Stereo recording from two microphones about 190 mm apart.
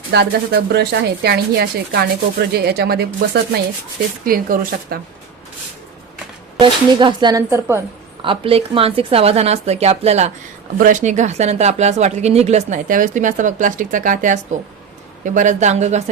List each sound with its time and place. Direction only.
0.1 s speech: 60° right (ahead or behind)
6.6 s speech: 25° right (ahead or behind)
8.2 s speech: 30° right (ahead or behind)